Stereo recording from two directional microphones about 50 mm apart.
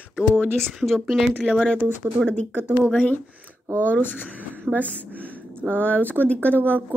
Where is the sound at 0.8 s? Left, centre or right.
Centre.